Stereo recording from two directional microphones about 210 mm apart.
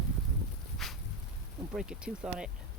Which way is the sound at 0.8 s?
Centre (ahead or behind).